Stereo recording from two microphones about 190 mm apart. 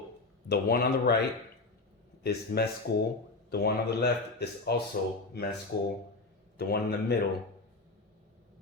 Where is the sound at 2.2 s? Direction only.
55° left (ahead or behind).